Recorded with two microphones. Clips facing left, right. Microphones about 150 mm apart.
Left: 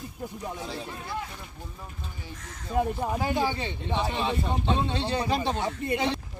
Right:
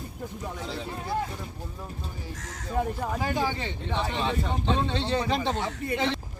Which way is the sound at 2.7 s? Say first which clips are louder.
Left 2 dB; 15° left (ahead or behind).